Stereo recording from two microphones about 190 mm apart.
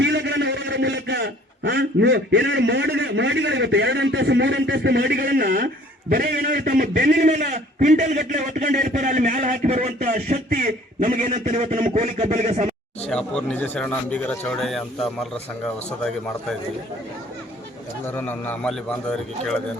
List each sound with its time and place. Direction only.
0.0 s a man's voice: 65° right (ahead or behind); by 12.7 s 40° right (ahead or behind)
13.1 s speech: 5° left (ahead or behind)
18.0 s a man's voice: 10° left (ahead or behind)